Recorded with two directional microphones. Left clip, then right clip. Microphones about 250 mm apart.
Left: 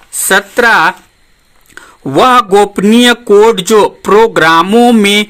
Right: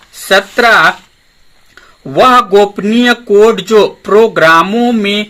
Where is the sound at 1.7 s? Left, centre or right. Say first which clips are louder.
Left 3 dB; left.